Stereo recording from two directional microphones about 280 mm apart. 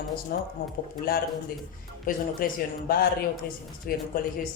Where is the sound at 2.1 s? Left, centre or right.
Left.